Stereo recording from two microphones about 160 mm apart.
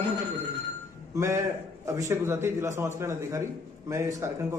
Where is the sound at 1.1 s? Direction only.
15° right (ahead or behind).